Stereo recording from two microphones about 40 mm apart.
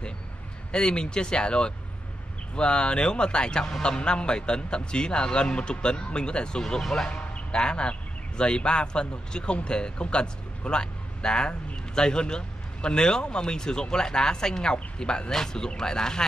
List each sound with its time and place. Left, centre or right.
0.7 s a man's voice: left